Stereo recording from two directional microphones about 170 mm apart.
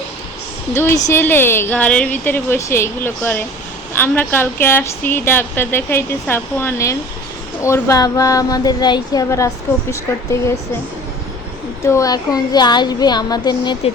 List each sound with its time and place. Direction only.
0.7 s a woman's voice: 15° left (ahead or behind)
11.8 s speech: 15° left (ahead or behind)